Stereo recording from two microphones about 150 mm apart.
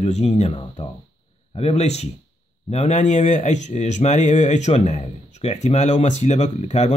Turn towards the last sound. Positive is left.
turn(degrees=50)  # may be behind; listen again after turning